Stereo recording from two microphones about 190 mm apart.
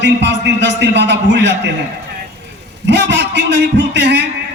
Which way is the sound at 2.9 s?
65° right (ahead or behind).